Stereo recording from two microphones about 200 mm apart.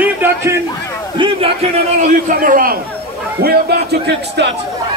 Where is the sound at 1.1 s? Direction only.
25° right (ahead or behind).